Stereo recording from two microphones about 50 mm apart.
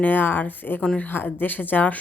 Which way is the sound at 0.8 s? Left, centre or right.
Left.